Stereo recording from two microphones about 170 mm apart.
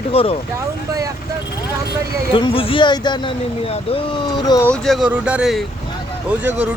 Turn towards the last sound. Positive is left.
turn(degrees=-10)  # may be behind; listen again after turning